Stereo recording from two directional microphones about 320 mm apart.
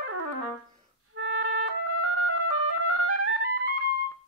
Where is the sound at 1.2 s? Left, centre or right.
Right.